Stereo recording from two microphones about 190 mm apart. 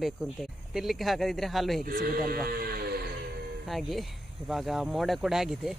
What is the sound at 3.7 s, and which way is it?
Speech, centre (ahead or behind).